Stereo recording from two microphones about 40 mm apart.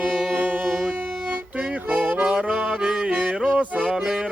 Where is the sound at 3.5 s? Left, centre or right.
Right.